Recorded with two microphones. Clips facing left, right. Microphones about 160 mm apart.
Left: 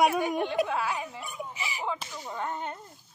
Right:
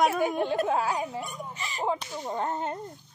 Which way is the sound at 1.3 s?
10° left (ahead or behind).